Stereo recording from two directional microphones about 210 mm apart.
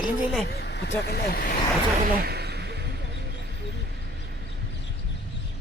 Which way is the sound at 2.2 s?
50° right (ahead or behind).